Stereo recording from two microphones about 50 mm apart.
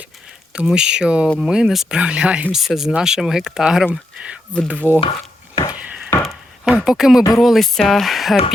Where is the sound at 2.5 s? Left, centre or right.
Centre.